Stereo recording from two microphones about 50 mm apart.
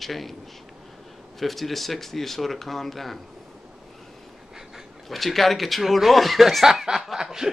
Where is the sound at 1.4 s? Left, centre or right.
Centre.